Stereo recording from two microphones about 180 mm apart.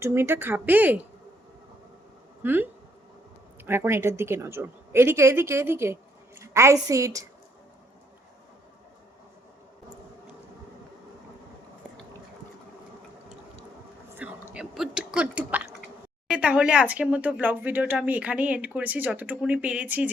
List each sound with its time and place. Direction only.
0.0 s speech: 15° right (ahead or behind)
2.4 s a woman's voice: 10° right (ahead or behind)
14.2 s a sound: 5° right (ahead or behind)
16.3 s speech: 5° right (ahead or behind)